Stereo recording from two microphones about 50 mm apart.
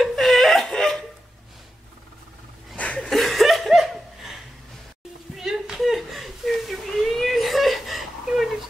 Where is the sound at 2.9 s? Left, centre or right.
Centre.